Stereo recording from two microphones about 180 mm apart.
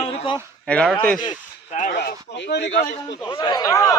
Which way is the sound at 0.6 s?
5° left (ahead or behind).